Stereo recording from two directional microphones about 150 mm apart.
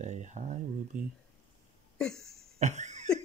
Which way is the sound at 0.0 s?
50° right (ahead or behind).